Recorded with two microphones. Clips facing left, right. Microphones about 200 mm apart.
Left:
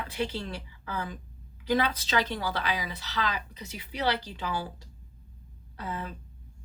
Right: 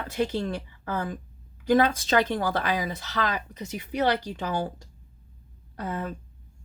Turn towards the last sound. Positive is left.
turn(degrees=-45)  # may be behind; listen again after turning